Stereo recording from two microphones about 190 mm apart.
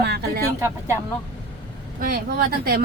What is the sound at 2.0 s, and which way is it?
Speech, 50° right (ahead or behind).